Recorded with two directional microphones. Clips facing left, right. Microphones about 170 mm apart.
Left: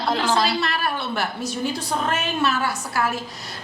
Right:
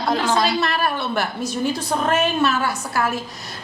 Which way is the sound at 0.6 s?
50° right (ahead or behind).